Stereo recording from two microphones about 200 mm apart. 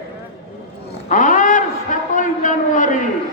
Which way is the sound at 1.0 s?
40° left (ahead or behind).